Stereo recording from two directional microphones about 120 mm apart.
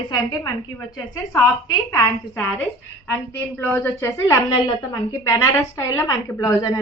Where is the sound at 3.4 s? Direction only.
15° left (ahead or behind).